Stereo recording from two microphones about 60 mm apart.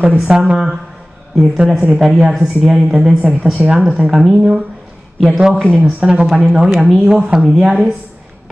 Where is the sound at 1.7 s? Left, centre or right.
Centre.